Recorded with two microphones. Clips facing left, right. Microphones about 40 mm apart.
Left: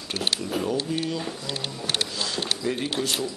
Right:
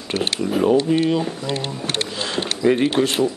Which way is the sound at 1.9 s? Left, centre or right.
Right.